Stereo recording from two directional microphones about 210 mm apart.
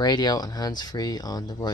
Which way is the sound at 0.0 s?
20° left (ahead or behind).